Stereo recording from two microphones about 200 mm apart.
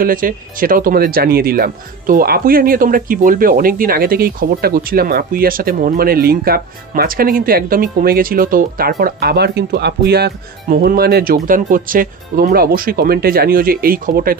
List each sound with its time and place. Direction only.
0.0 s speech: 45° right (ahead or behind)